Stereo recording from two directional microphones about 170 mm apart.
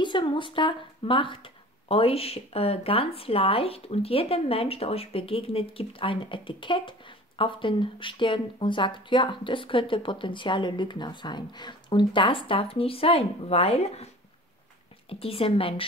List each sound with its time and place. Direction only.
0.0 s speech: 30° left (ahead or behind)